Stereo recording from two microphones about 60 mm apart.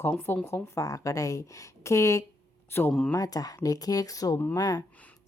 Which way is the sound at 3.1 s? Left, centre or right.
Left.